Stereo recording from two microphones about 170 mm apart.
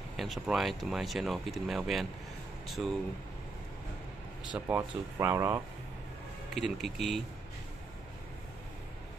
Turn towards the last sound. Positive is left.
turn(degrees=0)  # may be behind; listen again after turning